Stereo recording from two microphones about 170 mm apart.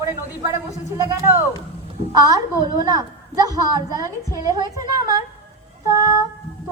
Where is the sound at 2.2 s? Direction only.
20° right (ahead or behind).